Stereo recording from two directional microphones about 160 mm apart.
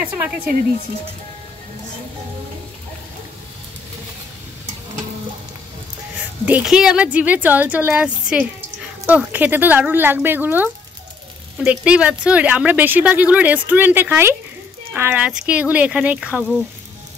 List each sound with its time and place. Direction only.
6.4 s speech: 5° right (ahead or behind)